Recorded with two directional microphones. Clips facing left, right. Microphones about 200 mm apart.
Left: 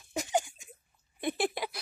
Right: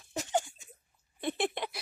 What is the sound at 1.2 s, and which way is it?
Speech, 5° left (ahead or behind).